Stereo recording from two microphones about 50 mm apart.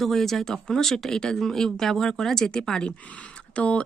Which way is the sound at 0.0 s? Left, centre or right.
Centre.